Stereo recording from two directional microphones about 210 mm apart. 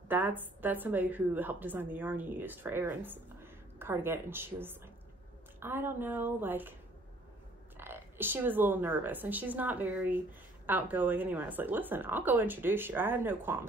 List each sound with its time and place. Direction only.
0.1 s a woman's voice: 10° right (ahead or behind)
7.7 s a woman's voice: 10° right (ahead or behind)